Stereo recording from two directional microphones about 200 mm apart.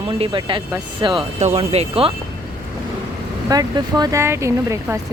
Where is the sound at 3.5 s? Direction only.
20° right (ahead or behind).